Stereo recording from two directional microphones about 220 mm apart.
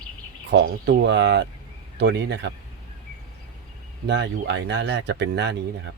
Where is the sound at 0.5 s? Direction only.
45° right (ahead or behind).